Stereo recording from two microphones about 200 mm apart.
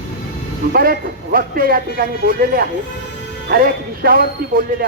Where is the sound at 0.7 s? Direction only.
50° right (ahead or behind).